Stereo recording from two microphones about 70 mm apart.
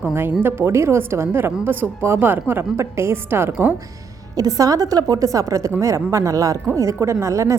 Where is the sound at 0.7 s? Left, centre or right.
Right.